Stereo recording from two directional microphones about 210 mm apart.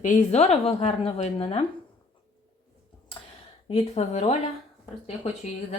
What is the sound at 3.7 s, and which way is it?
Speech, 30° left (ahead or behind).